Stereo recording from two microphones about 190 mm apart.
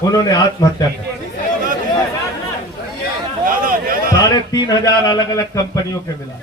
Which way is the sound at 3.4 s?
45° right (ahead or behind).